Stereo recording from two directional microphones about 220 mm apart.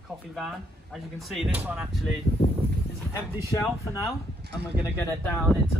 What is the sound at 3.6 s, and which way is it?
Speech, 15° left (ahead or behind).